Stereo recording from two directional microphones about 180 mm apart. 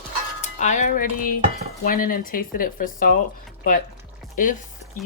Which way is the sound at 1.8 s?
50° left (ahead or behind).